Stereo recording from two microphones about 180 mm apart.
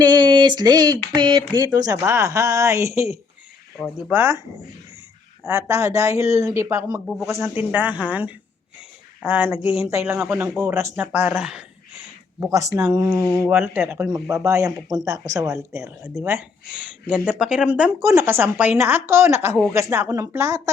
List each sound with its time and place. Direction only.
0.0 s a sound: 25° right (ahead or behind)
1.1 s speech: 25° right (ahead or behind)
5.5 s speech: 15° right (ahead or behind)
12.4 s speech: 15° right (ahead or behind)